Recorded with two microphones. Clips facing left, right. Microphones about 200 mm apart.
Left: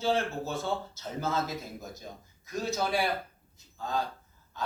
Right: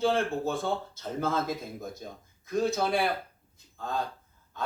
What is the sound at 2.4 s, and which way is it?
Speech, 55° right (ahead or behind).